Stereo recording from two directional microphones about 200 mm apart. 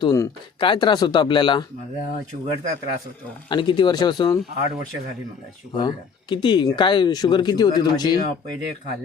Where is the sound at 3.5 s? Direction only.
25° left (ahead or behind).